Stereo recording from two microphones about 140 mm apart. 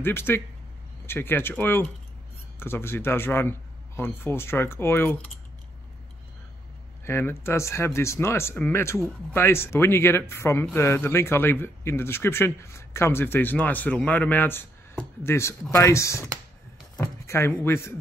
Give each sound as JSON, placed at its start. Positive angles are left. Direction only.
{"t": 0.0, "sound": "speech", "side_deg": 15}
{"t": 7.1, "sound": "speech", "side_deg": 15}